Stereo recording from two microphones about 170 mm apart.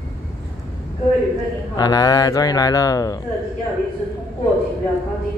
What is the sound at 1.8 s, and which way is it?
Speech, 20° left (ahead or behind).